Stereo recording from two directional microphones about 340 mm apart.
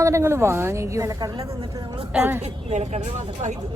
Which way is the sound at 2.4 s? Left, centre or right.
Centre.